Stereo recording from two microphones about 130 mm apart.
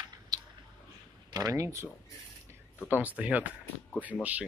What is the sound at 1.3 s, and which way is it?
Speech, 25° right (ahead or behind).